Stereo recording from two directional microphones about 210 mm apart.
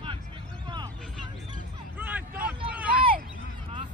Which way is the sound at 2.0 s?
10° right (ahead or behind).